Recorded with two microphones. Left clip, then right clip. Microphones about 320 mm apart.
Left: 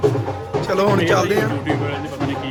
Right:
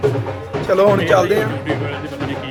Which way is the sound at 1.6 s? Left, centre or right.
Centre.